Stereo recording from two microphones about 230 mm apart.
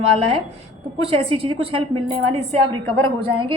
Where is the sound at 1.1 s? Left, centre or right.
Right.